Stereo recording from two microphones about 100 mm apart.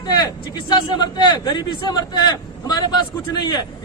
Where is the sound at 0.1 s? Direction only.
45° left (ahead or behind).